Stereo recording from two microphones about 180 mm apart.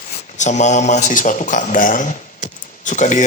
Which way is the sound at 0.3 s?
40° left (ahead or behind).